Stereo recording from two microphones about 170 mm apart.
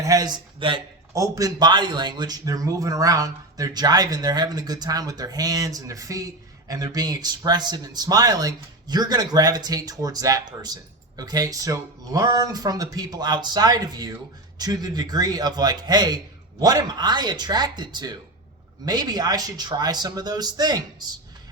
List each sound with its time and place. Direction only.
0.0 s a man's voice: 20° right (ahead or behind)